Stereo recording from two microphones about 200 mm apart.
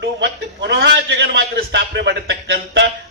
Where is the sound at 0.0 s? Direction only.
55° right (ahead or behind).